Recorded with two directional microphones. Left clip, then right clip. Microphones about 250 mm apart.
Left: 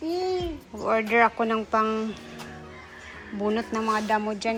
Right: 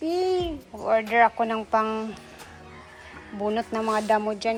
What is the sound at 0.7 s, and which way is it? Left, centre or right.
Speech, centre.